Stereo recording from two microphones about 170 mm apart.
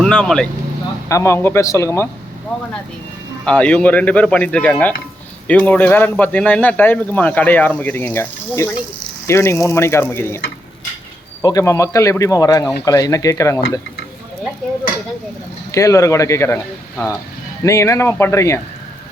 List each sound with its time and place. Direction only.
0.0 s speech: 5° left (ahead or behind)
1.0 s speech: 15° left (ahead or behind)
3.4 s speech: 5° left (ahead or behind)
11.4 s speech: 20° left (ahead or behind)
15.7 s speech: 20° left (ahead or behind)